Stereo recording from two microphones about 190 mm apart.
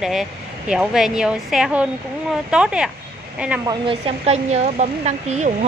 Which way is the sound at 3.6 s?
25° right (ahead or behind).